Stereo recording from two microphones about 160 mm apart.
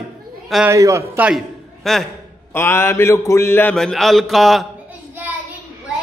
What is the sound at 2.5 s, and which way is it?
Mantra, 15° left (ahead or behind).